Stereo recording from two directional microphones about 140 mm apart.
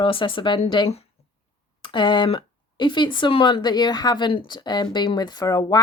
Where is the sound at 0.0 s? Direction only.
40° left (ahead or behind).